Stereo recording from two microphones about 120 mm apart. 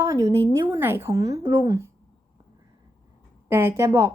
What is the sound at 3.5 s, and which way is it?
Speech, 20° right (ahead or behind).